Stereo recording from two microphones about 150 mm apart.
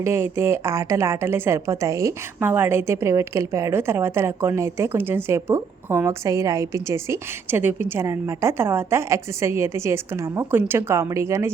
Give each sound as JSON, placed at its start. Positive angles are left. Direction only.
{"t": 0.0, "sound": "a woman's voice", "side_deg": -15}